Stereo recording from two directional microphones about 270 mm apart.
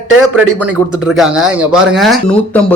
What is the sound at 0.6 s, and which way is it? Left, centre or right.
Speech, centre.